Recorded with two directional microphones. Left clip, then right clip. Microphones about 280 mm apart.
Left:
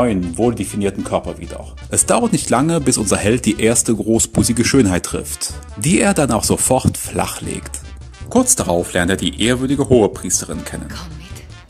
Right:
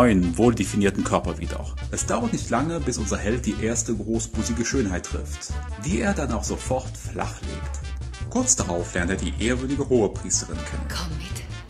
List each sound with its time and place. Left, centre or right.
0.0 s speech: centre
1.9 s speech: left
8.3 s speech: left